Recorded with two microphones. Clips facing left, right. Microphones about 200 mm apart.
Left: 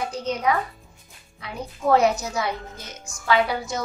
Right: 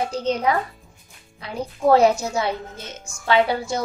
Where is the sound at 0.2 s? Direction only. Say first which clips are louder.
Right 1 dB; 30° right (ahead or behind).